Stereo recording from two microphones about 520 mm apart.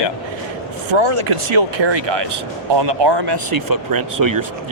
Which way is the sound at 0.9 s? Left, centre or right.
Right.